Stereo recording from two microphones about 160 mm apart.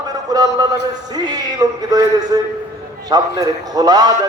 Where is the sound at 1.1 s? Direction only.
25° right (ahead or behind).